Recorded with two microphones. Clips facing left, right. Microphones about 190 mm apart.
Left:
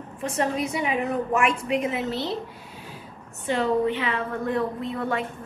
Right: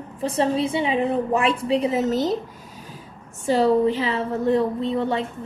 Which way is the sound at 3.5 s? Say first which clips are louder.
Right 5 dB; 35° right (ahead or behind).